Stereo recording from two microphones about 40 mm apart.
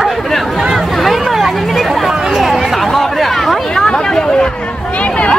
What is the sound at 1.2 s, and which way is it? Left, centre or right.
Hubbub, centre.